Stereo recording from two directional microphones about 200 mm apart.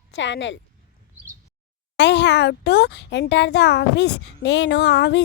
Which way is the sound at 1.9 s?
60° left (ahead or behind).